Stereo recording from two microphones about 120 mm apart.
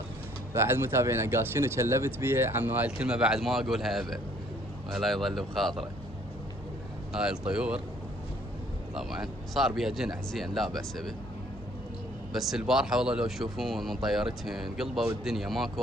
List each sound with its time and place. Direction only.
0.5 s speech: 20° right (ahead or behind); by 5.8 s centre (ahead or behind)
7.1 s speech: 5° right (ahead or behind)
9.0 s speech: 5° right (ahead or behind)
12.3 s speech: centre (ahead or behind)